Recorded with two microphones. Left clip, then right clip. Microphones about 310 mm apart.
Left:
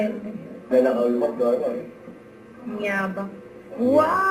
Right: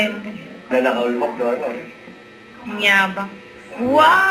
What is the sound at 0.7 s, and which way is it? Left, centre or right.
A man's voice, centre.